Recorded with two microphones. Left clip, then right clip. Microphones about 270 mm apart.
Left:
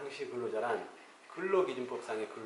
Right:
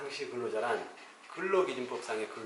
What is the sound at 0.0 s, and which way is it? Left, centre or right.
Speech, centre.